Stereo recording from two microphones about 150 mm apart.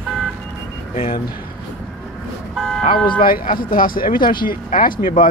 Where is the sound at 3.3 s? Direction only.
70° left (ahead or behind).